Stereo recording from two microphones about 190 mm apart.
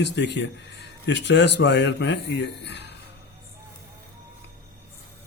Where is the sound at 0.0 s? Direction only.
65° left (ahead or behind).